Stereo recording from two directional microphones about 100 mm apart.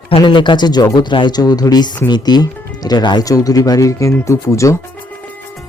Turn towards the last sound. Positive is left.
turn(degrees=30)  # may be behind; listen again after turning